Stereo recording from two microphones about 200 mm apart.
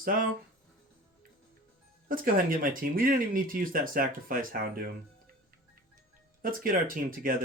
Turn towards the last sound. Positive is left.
turn(degrees=-45)  # may be behind; listen again after turning